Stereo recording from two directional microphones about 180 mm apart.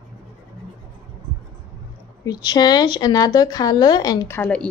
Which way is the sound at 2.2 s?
20° left (ahead or behind).